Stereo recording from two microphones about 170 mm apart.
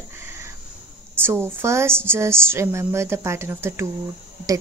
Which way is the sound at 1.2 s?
15° right (ahead or behind).